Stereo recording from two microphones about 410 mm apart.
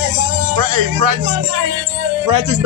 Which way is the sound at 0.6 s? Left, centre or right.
Right.